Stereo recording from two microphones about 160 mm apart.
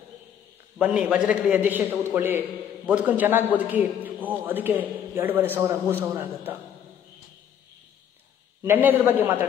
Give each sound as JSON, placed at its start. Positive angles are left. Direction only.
{"t": 0.7, "sound": "a man's voice", "side_deg": -5}
{"t": 8.6, "sound": "a man's voice", "side_deg": -15}